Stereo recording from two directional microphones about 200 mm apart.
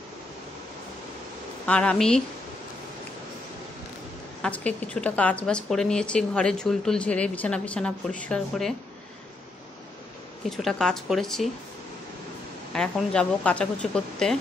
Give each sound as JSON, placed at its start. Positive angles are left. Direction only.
{"t": 1.7, "sound": "a woman's voice", "side_deg": 5}
{"t": 4.4, "sound": "a woman's voice", "side_deg": 5}
{"t": 10.5, "sound": "a woman's voice", "side_deg": 0}
{"t": 12.7, "sound": "a woman's voice", "side_deg": 5}